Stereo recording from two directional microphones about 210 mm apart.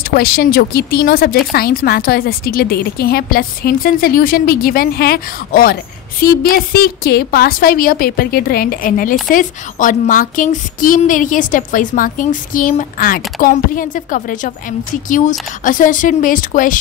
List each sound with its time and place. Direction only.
0.1 s a woman's voice: 45° left (ahead or behind)